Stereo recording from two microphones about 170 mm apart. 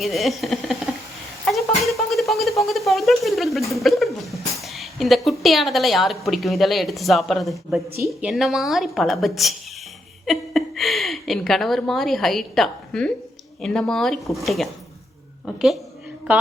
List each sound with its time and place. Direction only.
0.0 s a woman's voice: centre (ahead or behind)
1.5 s a sound: centre (ahead or behind)
3.7 s a woman's voice: centre (ahead or behind)